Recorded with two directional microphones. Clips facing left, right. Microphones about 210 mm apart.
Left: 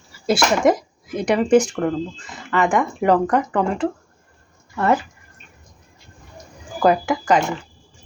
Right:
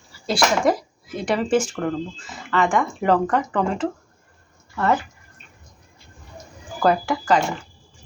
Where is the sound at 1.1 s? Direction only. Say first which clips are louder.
Left 5 dB; centre (ahead or behind).